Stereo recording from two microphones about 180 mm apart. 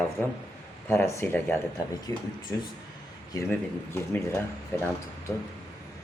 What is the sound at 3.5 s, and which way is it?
Speech, 10° left (ahead or behind).